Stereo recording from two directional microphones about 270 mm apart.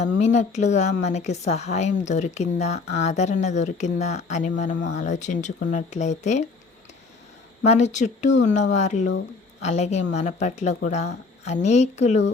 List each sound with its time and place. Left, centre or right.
0.0 s speech: left
7.6 s a woman's voice: left